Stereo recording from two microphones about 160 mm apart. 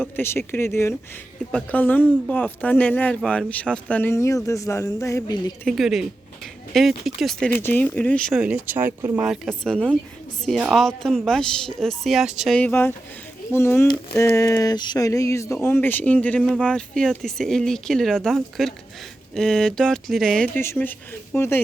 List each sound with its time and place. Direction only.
0.2 s speech: 15° left (ahead or behind)
5.6 s speech: centre (ahead or behind)
7.5 s speech: 15° left (ahead or behind)
8.4 s speech: 10° right (ahead or behind)
12.5 s speech: 10° left (ahead or behind)
20.6 s speech: 15° left (ahead or behind)